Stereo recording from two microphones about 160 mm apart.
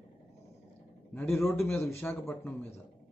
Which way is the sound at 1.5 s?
15° left (ahead or behind).